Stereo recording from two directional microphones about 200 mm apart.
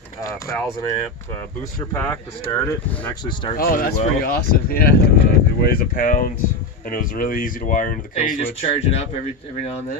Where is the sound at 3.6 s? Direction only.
50° left (ahead or behind); by 8.4 s 35° left (ahead or behind).